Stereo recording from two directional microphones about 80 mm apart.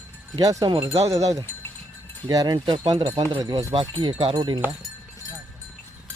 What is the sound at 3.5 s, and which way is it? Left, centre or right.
Speech, right.